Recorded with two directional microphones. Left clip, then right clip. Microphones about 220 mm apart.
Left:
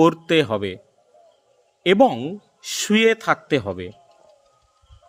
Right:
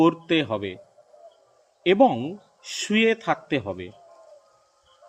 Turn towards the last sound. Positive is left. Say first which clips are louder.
# left 5 dB
turn(degrees=55)  # may be behind; listen again after turning